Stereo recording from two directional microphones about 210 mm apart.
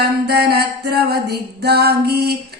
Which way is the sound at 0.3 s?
50° right (ahead or behind).